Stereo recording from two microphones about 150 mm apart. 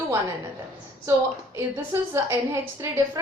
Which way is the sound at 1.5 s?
20° right (ahead or behind).